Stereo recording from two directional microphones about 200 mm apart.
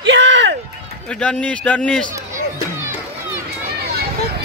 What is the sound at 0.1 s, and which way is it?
Music, 60° right (ahead or behind).